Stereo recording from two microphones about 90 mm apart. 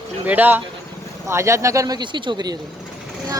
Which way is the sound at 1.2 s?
30° right (ahead or behind).